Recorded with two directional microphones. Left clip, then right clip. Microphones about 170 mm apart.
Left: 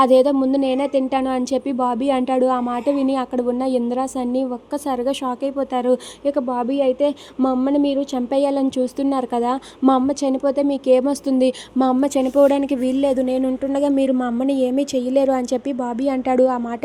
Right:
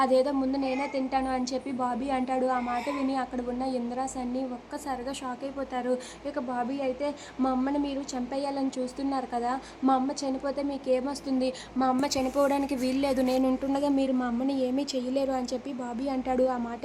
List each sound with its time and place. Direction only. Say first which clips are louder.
0.0 s a woman's voice: left 10 dB; 60° left (ahead or behind)
12.4 s a woman's voice: left 11 dB; 35° left (ahead or behind)